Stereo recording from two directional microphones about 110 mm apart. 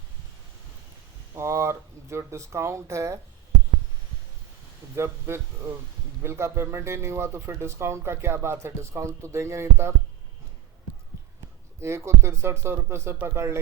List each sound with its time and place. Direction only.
1.3 s speech: 25° right (ahead or behind)
4.9 s speech: 25° right (ahead or behind)
11.8 s speech: 25° right (ahead or behind)